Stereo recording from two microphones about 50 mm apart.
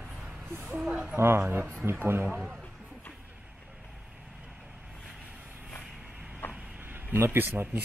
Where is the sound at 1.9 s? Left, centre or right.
Right.